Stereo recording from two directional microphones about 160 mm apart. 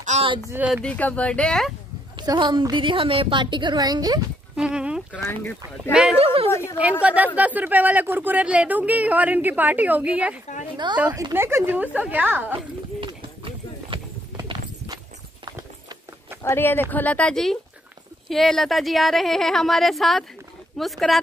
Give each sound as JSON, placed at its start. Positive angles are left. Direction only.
{"t": 0.1, "sound": "a sound", "side_deg": -45}
{"t": 0.5, "sound": "speech", "side_deg": -10}
{"t": 0.8, "sound": "speech", "side_deg": 10}
{"t": 2.1, "sound": "a woman's voice", "side_deg": -30}
{"t": 4.6, "sound": "speech", "side_deg": -5}
{"t": 5.1, "sound": "speech", "side_deg": 10}
{"t": 6.1, "sound": "a woman's voice", "side_deg": -40}
{"t": 6.8, "sound": "speech", "side_deg": -10}
{"t": 13.0, "sound": "clip-clop", "side_deg": -35}
{"t": 16.4, "sound": "speech", "side_deg": 15}